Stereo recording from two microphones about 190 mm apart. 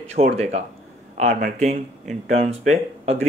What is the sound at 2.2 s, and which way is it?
Speech, 35° right (ahead or behind).